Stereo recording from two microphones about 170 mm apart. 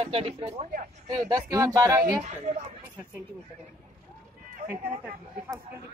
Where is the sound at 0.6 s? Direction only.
50° right (ahead or behind).